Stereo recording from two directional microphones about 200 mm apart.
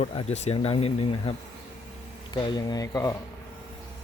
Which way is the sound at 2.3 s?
20° left (ahead or behind).